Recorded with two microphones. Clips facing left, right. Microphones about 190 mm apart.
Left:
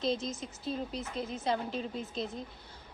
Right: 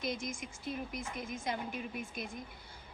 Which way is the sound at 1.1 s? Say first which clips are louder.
Left 4 dB; 10° right (ahead or behind).